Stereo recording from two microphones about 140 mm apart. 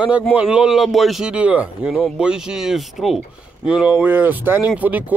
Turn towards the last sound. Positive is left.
turn(degrees=-10)  # may be behind; listen again after turning